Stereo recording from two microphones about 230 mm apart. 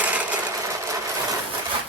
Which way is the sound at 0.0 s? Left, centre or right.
Centre.